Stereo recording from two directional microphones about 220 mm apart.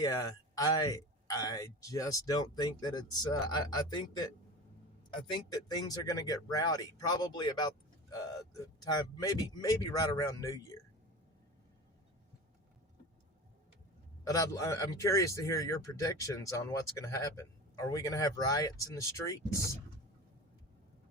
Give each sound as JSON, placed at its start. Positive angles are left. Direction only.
{"t": 0.0, "sound": "speech", "side_deg": 15}
{"t": 8.8, "sound": "speech", "side_deg": 15}
{"t": 14.3, "sound": "speech", "side_deg": 15}